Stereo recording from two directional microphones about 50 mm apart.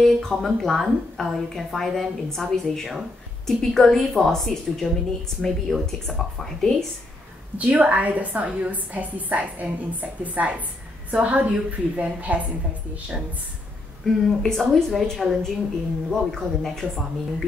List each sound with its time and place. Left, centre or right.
0.0 s a woman's voice: centre
7.5 s a woman's voice: right
14.2 s speech: centre